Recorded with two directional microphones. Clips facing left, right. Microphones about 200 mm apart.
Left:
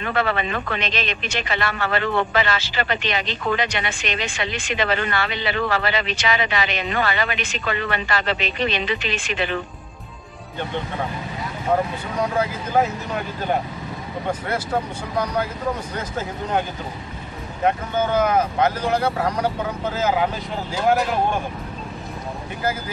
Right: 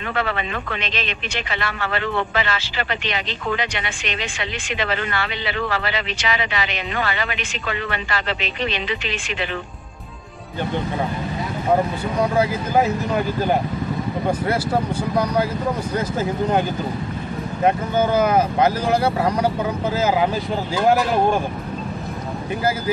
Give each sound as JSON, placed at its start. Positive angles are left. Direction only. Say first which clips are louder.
{"t": 0.1, "sound": "speech", "louder": "left 2 dB", "side_deg": 45}
{"t": 18.1, "sound": "speech", "louder": "even", "side_deg": -10}